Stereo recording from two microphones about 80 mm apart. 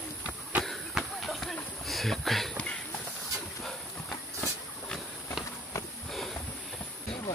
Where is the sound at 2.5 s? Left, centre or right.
Centre.